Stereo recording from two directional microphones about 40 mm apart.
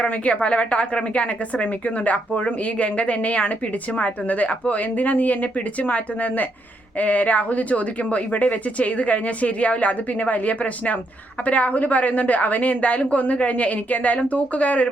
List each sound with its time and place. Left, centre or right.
0.0 s a woman's voice: left